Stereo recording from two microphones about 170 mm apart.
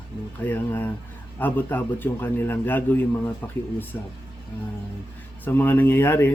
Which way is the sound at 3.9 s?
15° left (ahead or behind).